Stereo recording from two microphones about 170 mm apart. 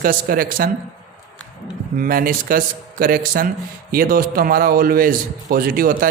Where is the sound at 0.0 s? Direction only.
55° right (ahead or behind).